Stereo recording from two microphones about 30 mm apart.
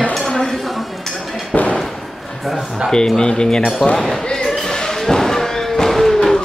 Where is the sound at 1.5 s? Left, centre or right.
Left.